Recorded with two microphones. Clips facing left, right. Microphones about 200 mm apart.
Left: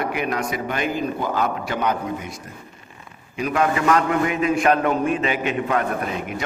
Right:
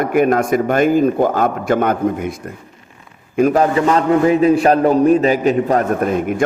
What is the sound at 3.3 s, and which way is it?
A man's voice, 40° right (ahead or behind).